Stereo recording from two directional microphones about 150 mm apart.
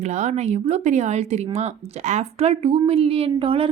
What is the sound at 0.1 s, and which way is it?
A woman's voice, 50° right (ahead or behind).